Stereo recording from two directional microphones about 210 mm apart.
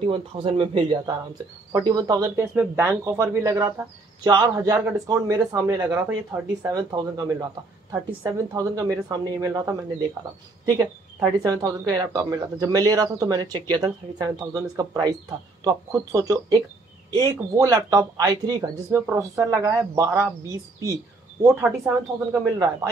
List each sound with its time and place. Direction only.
0.0 s speech: 25° right (ahead or behind)
21.4 s speech: 10° right (ahead or behind)